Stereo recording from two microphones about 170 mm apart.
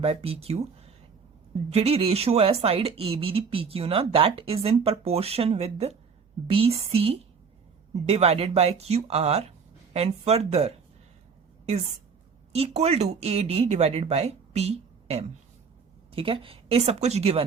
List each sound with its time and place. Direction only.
0.0 s speech: 35° right (ahead or behind)
12.5 s speech: 40° right (ahead or behind)